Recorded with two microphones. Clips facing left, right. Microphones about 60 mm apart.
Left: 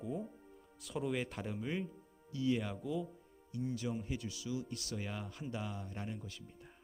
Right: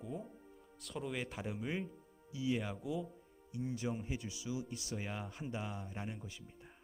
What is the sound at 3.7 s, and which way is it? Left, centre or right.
Speech, right.